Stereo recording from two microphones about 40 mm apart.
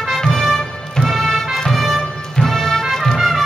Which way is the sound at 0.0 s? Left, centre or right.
Centre.